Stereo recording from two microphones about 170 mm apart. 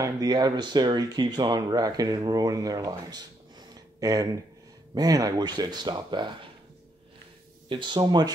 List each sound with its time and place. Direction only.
0.0 s speech: 20° right (ahead or behind)
7.6 s speech: 30° right (ahead or behind)